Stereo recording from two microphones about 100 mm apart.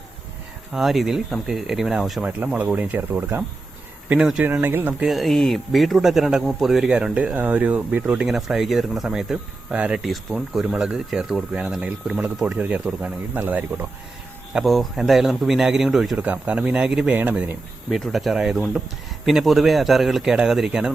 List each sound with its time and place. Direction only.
0.7 s a man's voice: centre (ahead or behind)
2.2 s speech: 15° right (ahead or behind)
4.1 s speech: 10° right (ahead or behind)
4.6 s speech: 20° right (ahead or behind)
5.0 s a man's voice: centre (ahead or behind); by 13.8 s 15° right (ahead or behind)
14.5 s a man's voice: centre (ahead or behind)
16.1 s speech: 15° right (ahead or behind)
17.9 s a man's voice: centre (ahead or behind)